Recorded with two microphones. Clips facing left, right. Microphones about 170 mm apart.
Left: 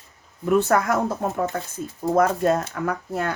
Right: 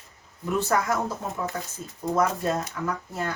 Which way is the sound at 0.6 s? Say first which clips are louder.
Left 4 dB; 60° left (ahead or behind).